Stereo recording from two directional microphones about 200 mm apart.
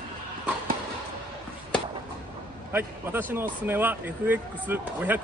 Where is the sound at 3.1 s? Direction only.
10° right (ahead or behind).